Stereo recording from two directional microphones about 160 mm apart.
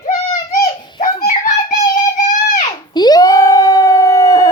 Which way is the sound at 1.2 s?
50° left (ahead or behind).